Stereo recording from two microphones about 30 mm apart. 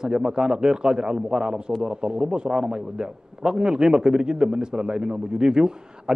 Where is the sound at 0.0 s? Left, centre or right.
Right.